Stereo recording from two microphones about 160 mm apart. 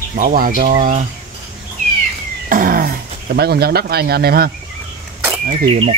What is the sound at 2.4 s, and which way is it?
Speech, 60° right (ahead or behind).